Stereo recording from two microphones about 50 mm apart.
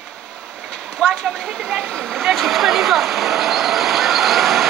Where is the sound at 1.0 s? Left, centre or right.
Centre.